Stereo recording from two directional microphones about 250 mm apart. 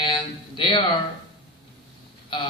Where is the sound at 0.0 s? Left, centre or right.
Centre.